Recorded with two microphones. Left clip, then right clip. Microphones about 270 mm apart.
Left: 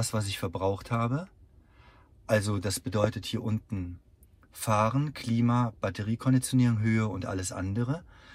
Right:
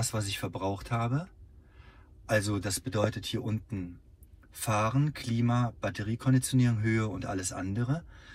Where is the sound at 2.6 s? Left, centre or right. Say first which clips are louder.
Left 2 dB; left.